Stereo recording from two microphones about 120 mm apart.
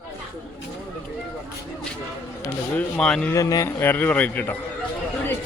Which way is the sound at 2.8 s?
5° left (ahead or behind).